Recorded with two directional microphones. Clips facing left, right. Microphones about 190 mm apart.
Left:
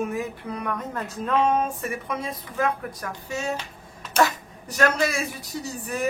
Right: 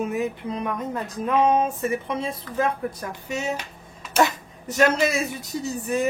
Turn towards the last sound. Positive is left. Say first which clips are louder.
# right 5 dB
turn(degrees=-20)  # may be behind; listen again after turning